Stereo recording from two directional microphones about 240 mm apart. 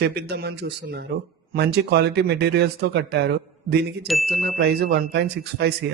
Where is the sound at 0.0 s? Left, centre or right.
Right.